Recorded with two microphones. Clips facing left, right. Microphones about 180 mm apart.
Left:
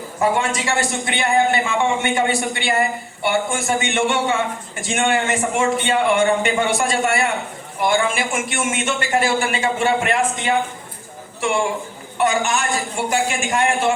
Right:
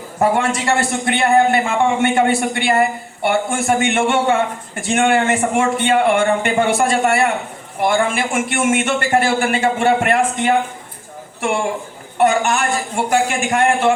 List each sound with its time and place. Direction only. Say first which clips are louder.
0.2 s a man's voice: right 3 dB; 60° right (ahead or behind)
12.1 s a man's voice: right 4 dB; 60° right (ahead or behind)